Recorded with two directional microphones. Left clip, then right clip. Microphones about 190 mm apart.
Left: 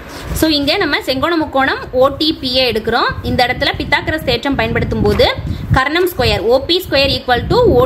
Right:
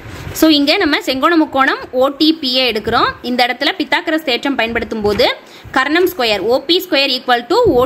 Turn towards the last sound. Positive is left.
turn(degrees=-25)  # may be behind; listen again after turning